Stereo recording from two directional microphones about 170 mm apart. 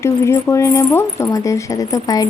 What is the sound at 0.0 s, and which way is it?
Speech, 15° left (ahead or behind).